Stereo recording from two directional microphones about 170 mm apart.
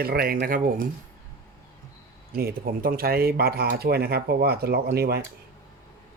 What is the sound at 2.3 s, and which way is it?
Speech, 60° right (ahead or behind).